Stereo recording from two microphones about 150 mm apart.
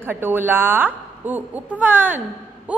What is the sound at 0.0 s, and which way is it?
Speech, 15° right (ahead or behind).